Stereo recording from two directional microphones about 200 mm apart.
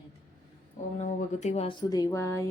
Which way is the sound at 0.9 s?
35° left (ahead or behind).